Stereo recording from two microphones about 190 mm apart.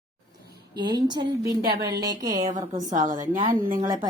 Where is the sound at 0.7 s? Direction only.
20° right (ahead or behind).